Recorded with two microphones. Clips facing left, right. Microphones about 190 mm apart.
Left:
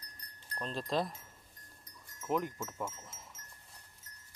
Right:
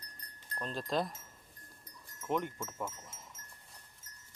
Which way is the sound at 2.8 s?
5° left (ahead or behind).